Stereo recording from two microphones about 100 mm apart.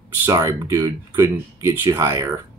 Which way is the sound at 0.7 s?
25° right (ahead or behind).